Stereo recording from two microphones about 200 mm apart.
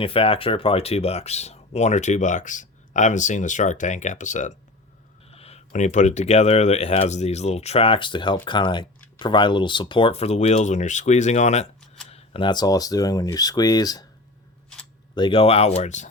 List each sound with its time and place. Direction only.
0.0 s speech: 25° left (ahead or behind)
15.1 s speech: 25° left (ahead or behind)